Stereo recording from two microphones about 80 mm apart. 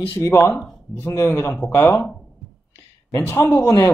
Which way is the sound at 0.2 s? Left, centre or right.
Left.